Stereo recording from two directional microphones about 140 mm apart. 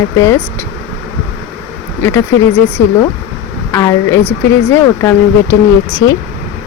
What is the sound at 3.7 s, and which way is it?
Speech, 20° left (ahead or behind).